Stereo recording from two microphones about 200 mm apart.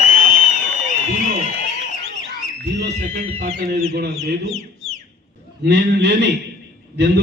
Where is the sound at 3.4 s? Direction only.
50° right (ahead or behind).